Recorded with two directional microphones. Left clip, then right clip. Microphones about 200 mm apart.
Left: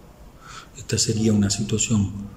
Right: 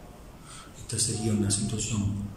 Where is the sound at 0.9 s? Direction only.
55° left (ahead or behind).